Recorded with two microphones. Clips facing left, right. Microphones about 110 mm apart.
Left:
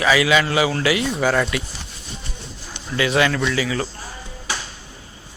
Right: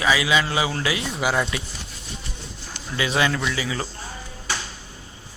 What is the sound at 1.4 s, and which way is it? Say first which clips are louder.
Speech: left 3 dB; 25° right (ahead or behind).